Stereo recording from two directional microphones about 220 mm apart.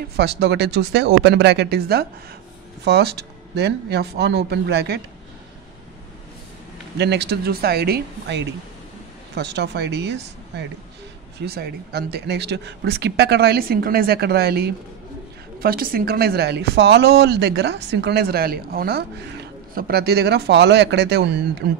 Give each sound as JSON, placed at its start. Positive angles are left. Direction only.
{"t": 0.1, "sound": "a woman's voice", "side_deg": -50}
{"t": 7.0, "sound": "a woman's voice", "side_deg": -50}
{"t": 11.3, "sound": "a woman's voice", "side_deg": -45}